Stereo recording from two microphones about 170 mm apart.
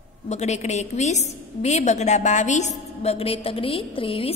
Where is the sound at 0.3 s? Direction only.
40° left (ahead or behind).